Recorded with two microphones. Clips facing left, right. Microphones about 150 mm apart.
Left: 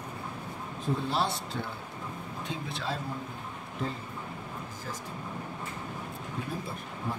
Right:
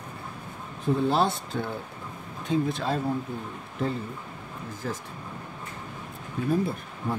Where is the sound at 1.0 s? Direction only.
50° right (ahead or behind).